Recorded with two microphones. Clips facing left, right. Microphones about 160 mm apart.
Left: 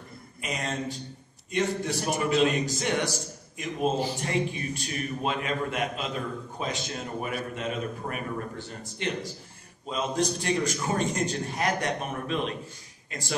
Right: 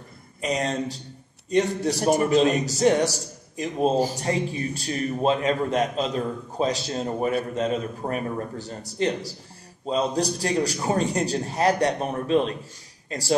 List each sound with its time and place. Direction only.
0.4 s a man's voice: 35° right (ahead or behind)